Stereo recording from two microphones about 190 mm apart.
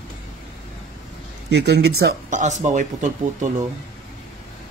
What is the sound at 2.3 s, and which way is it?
Speech, 40° right (ahead or behind).